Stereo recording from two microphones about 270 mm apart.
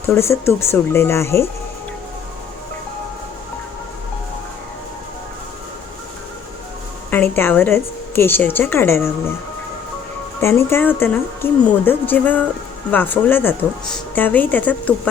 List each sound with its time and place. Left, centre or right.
0.0 s speech: centre
7.1 s speech: centre
10.4 s speech: centre